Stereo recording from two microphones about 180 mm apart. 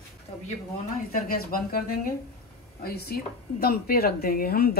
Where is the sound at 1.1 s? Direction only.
55° left (ahead or behind).